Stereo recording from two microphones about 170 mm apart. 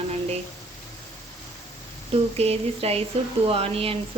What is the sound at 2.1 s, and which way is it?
A woman's voice, 35° right (ahead or behind).